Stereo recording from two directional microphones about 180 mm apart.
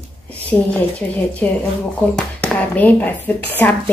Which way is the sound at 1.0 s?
10° left (ahead or behind).